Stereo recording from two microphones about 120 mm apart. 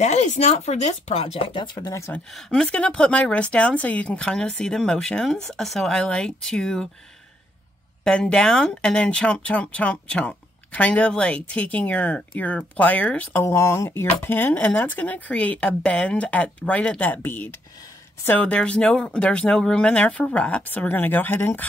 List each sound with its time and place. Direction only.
0.0 s speech: 80° left; by 2.0 s 40° left (ahead or behind)
2.0 s speech: 20° left (ahead or behind)
2.3 s speech: 5° left (ahead or behind)
8.0 s speech: 5° left (ahead or behind)
13.4 s speech: 25° left (ahead or behind)